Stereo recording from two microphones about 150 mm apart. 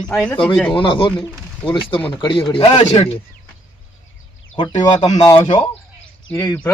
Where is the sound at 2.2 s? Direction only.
35° left (ahead or behind).